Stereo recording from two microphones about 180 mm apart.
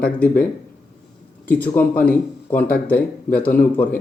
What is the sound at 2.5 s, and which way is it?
Speech, 55° left (ahead or behind).